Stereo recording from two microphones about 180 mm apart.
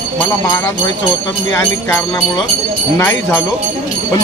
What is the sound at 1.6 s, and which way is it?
A man's voice, 10° left (ahead or behind).